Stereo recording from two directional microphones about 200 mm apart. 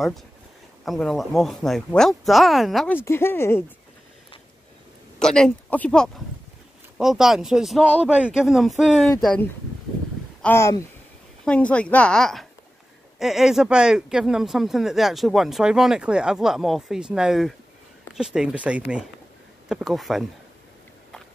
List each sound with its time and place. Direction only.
0.8 s speech: centre (ahead or behind)
3.0 s speech: 10° left (ahead or behind)
5.2 s speech: 5° left (ahead or behind)